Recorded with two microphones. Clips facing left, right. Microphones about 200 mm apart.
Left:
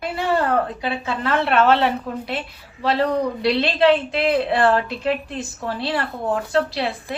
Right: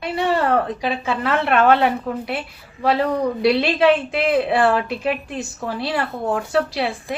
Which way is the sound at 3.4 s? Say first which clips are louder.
Right 2 dB; 15° right (ahead or behind).